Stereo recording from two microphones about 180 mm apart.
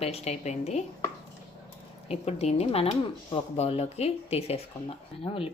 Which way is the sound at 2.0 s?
35° left (ahead or behind).